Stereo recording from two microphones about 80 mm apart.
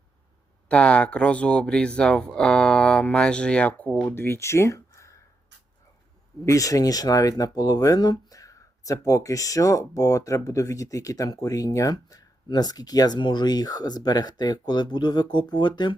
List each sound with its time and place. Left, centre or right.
0.7 s speech: centre
4.1 s speech: left
6.4 s speech: left
13.1 s speech: left